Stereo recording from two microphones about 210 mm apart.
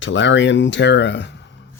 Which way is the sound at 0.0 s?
60° left (ahead or behind).